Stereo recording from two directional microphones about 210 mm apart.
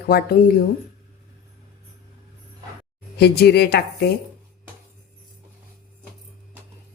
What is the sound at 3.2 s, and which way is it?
Speech, 50° left (ahead or behind).